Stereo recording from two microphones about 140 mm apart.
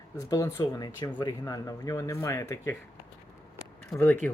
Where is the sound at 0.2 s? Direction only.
25° left (ahead or behind).